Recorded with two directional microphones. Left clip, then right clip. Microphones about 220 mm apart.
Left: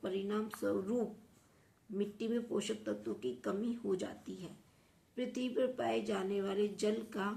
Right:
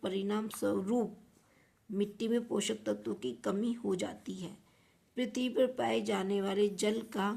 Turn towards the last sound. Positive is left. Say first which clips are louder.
# right 3 dB
turn(degrees=-50)  # may be behind; listen again after turning